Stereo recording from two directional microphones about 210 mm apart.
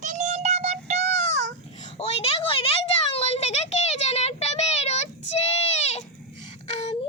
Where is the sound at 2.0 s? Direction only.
25° left (ahead or behind).